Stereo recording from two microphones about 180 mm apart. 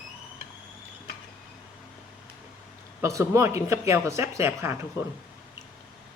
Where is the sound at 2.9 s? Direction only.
15° right (ahead or behind).